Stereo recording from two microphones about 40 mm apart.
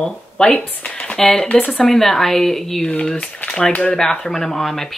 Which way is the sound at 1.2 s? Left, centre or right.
Centre.